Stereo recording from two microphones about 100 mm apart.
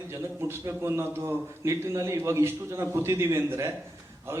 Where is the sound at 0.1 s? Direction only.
25° right (ahead or behind).